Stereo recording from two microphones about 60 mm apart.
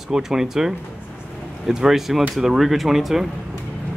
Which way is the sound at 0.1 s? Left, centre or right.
Centre.